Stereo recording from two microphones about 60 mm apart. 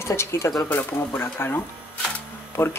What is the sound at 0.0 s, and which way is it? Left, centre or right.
Speech, left.